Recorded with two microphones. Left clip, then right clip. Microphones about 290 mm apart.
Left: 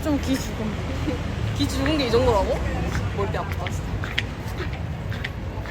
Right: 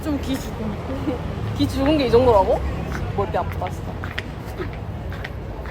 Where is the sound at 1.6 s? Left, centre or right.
Right.